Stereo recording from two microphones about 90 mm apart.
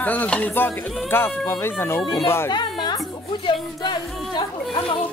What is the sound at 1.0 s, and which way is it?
Speech, 25° left (ahead or behind).